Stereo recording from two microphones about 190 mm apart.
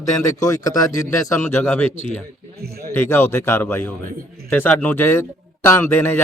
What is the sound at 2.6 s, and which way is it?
Speech, 55° right (ahead or behind).